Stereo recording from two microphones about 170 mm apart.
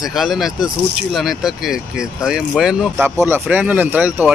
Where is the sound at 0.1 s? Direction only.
Centre (ahead or behind).